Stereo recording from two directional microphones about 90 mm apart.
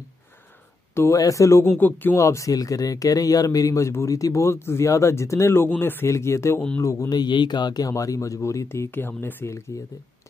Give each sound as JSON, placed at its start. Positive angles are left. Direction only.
{"t": 0.9, "sound": "speech", "side_deg": 35}
{"t": 1.8, "sound": "speech", "side_deg": 20}
{"t": 2.1, "sound": "speech", "side_deg": 35}
{"t": 6.0, "sound": "speech", "side_deg": 35}
{"t": 7.9, "sound": "speech", "side_deg": 35}